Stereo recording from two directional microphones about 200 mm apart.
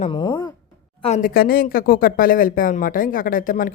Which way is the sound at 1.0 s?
40° left (ahead or behind).